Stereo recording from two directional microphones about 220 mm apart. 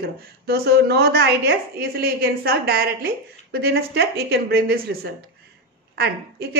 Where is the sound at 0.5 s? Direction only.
45° right (ahead or behind).